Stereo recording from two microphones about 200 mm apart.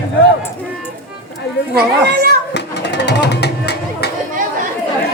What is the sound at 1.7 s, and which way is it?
Speech, 50° right (ahead or behind).